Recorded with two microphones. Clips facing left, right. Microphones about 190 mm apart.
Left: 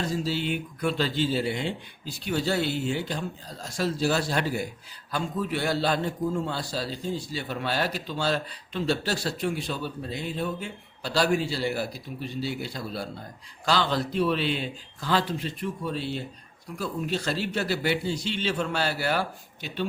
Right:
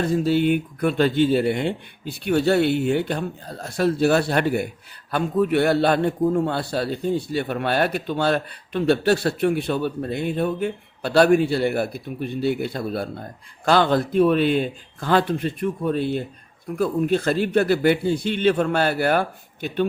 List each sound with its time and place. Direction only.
0.0 s a man's voice: 55° right (ahead or behind)